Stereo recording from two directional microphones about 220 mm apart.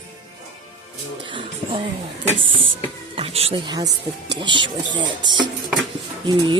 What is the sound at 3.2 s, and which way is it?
Music, 25° right (ahead or behind).